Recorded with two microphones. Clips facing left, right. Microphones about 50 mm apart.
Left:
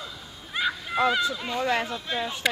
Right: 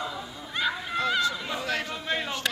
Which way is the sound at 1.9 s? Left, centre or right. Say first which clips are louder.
Even; centre.